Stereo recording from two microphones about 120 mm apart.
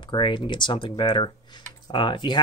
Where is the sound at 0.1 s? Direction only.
40° left (ahead or behind).